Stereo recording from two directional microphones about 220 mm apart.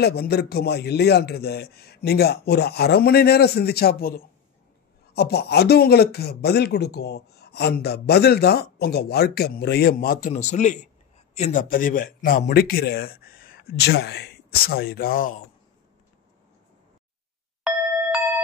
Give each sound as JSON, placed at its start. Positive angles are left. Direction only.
{"t": 0.0, "sound": "speech", "side_deg": 45}